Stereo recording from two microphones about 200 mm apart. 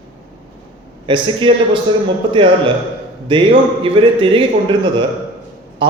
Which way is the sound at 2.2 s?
25° right (ahead or behind).